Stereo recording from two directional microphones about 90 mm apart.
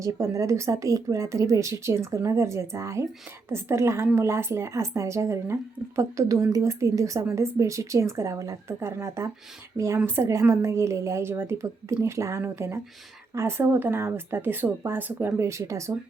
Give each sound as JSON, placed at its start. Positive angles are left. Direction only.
{"t": 0.0, "sound": "a woman's voice", "side_deg": -35}
{"t": 15.4, "sound": "a woman's voice", "side_deg": -35}